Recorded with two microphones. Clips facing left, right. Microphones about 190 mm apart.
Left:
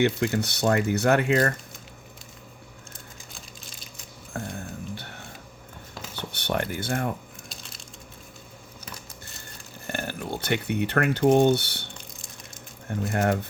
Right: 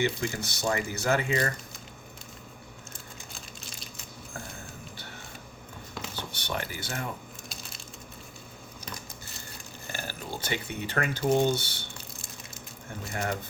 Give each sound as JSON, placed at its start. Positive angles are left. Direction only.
{"t": 0.0, "sound": "speech", "side_deg": 60}
{"t": 6.1, "sound": "speech", "side_deg": 60}
{"t": 9.8, "sound": "speech", "side_deg": 60}
{"t": 13.1, "sound": "speech", "side_deg": 60}